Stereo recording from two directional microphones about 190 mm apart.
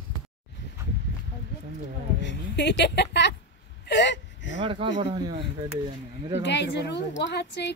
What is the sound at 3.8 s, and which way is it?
Whimper, 65° left (ahead or behind).